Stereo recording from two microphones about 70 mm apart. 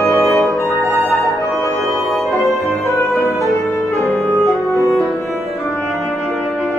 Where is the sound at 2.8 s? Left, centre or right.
Left.